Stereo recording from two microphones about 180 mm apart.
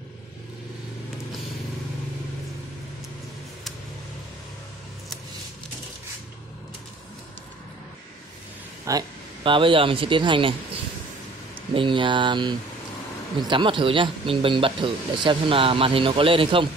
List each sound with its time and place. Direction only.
8.8 s speech: 25° right (ahead or behind)
11.7 s speech: 30° right (ahead or behind)